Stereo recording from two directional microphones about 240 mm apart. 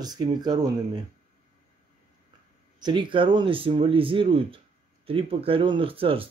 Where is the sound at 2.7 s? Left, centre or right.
Centre.